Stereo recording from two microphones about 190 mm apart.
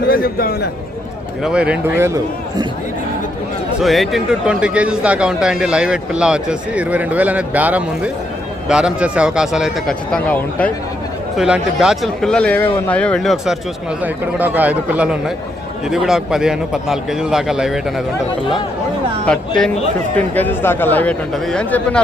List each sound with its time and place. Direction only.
0.1 s a man's voice: 50° left (ahead or behind)
1.5 s a man's voice: 5° right (ahead or behind)
3.8 s a man's voice: centre (ahead or behind)
11.3 s a man's voice: 5° right (ahead or behind)
19.2 s a man's voice: 5° left (ahead or behind)